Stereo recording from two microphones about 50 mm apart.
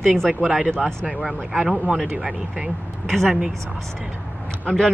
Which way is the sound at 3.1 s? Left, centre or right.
Centre.